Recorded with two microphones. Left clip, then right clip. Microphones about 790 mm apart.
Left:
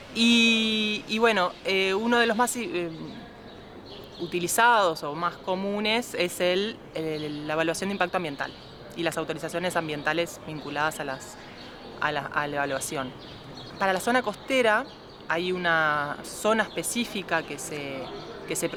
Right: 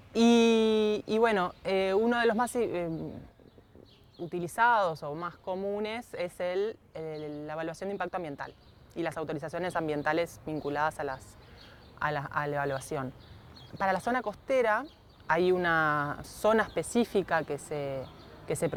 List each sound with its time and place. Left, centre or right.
0.1 s speech: right
4.3 s speech: right